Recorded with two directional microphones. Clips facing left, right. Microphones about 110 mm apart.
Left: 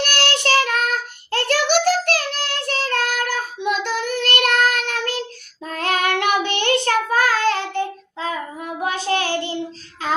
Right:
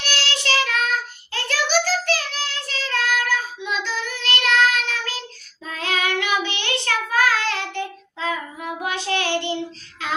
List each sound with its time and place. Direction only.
0.0 s child singing: 55° left (ahead or behind); by 9.6 s 35° left (ahead or behind)